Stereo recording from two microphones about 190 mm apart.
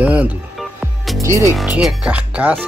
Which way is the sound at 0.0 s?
5° right (ahead or behind).